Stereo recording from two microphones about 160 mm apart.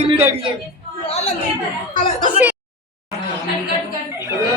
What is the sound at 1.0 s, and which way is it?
Speech, 40° left (ahead or behind).